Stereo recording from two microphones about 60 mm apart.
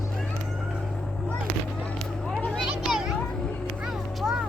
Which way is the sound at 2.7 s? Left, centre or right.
Centre.